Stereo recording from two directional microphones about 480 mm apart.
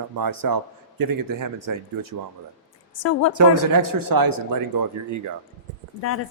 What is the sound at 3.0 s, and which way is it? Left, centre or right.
Speech, left.